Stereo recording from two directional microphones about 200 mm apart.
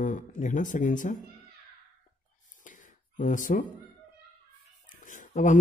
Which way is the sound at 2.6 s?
40° left (ahead or behind).